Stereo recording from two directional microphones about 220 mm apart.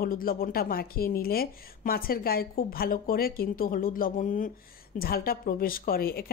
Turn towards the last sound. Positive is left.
turn(degrees=40)  # may be behind; listen again after turning